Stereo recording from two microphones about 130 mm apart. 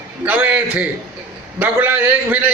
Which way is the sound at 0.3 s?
10° right (ahead or behind).